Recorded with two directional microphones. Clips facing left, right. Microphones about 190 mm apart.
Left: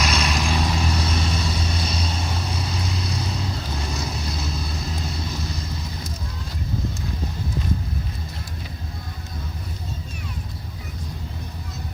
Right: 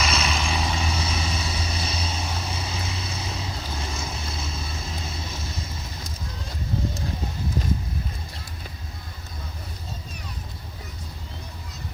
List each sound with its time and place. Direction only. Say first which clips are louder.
0.0 s vehicle: left 2 dB; centre (ahead or behind)